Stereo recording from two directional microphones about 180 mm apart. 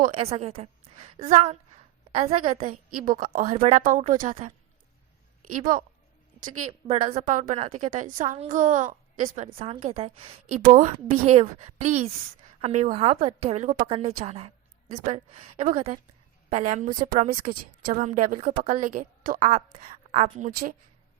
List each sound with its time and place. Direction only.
0.1 s a woman's voice: 35° right (ahead or behind)
2.9 s a woman's voice: 50° right (ahead or behind)
3.4 s a woman's voice: 35° right (ahead or behind)
10.6 s a woman's voice: 45° right (ahead or behind)